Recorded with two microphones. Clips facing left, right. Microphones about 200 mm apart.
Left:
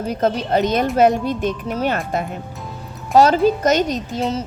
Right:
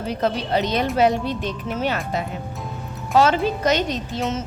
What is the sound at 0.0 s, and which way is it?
A woman's voice, 45° left (ahead or behind).